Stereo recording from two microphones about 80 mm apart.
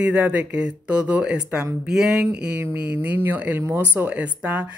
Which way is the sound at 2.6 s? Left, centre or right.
Right.